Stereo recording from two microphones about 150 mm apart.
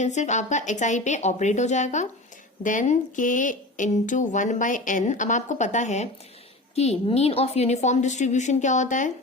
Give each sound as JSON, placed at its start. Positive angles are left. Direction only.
{"t": 0.0, "sound": "a woman's voice", "side_deg": 50}